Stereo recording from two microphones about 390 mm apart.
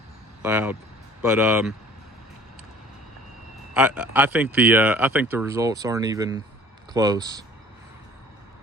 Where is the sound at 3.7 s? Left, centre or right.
Centre.